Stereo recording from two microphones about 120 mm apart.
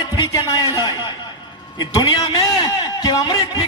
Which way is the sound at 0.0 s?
35° left (ahead or behind).